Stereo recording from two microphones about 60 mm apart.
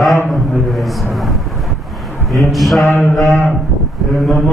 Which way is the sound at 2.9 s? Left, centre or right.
Left.